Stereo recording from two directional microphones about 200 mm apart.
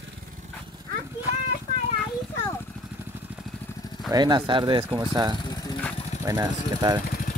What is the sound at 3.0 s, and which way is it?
Vehicle, 10° right (ahead or behind).